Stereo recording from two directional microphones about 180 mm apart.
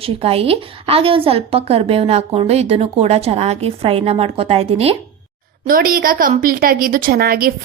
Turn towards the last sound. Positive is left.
turn(degrees=-55)  # may be behind; listen again after turning